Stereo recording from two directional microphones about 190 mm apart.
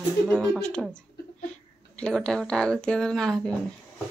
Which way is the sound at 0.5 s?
5° left (ahead or behind).